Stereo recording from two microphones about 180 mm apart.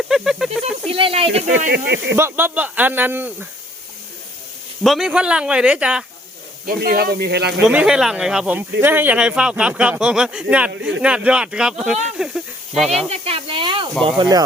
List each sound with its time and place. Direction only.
0.1 s snake: centre (ahead or behind)
0.9 s speech: 30° right (ahead or behind)
1.7 s speech: 65° right (ahead or behind)
2.1 s speech: 15° right (ahead or behind)
4.8 s a man's voice: centre (ahead or behind)
6.7 s speech: 55° right (ahead or behind)
7.6 s a man's voice: 5° right (ahead or behind)
13.0 s speech: 35° right (ahead or behind)